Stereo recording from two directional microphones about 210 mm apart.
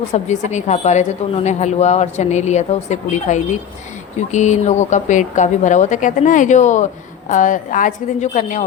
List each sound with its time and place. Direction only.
0.1 s a woman's voice: 35° left (ahead or behind)